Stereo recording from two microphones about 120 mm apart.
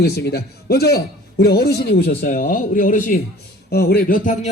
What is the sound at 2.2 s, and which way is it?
A man's voice, 90° left.